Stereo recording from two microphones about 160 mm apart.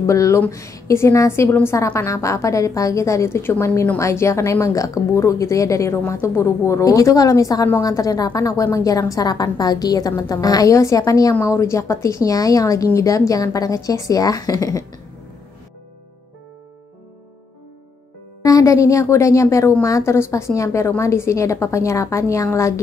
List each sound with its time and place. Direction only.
0.0 s a woman's voice: 20° left (ahead or behind)
18.4 s a woman's voice: 20° left (ahead or behind)